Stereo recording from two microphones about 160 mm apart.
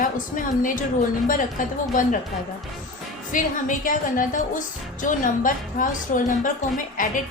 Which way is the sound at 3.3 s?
55° left (ahead or behind).